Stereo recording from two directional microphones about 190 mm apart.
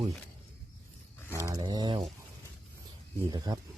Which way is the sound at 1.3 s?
15° right (ahead or behind).